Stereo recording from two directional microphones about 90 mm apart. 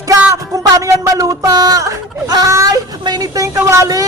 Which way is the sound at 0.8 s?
35° right (ahead or behind).